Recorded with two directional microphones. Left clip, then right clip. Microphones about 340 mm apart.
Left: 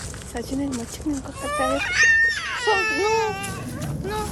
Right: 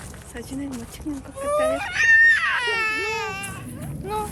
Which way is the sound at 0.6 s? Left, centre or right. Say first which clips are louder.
Left 5 dB; centre.